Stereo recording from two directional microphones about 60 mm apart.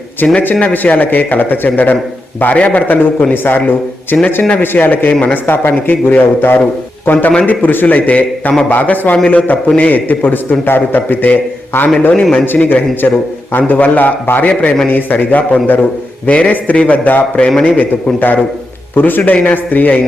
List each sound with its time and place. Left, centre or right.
0.2 s a man's voice: centre
2.8 s a man's voice: left
4.1 s a man's voice: left
4.6 s a man's voice: left